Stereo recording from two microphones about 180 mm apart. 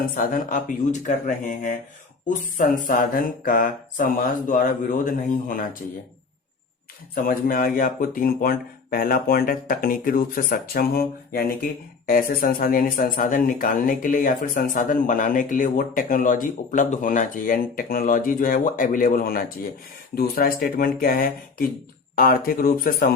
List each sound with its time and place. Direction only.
0.0 s speech: 45° left (ahead or behind)
7.3 s speech: 55° left (ahead or behind)